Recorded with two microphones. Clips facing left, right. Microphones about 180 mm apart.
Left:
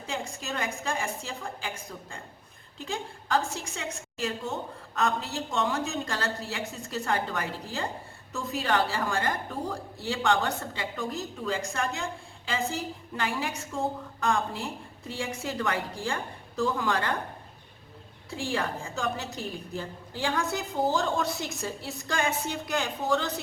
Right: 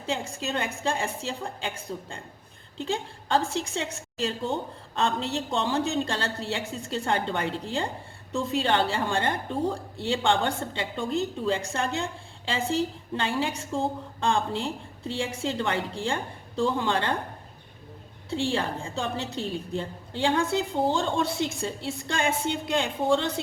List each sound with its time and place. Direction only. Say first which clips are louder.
0.0 s a woman's voice: right 4 dB; 30° right (ahead or behind)
18.3 s a woman's voice: right 4 dB; 30° right (ahead or behind)